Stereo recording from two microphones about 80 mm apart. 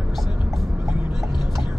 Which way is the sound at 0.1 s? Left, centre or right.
Centre.